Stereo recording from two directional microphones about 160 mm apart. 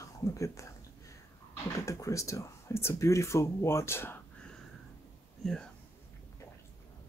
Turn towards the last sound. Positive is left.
turn(degrees=0)  # may be behind; listen again after turning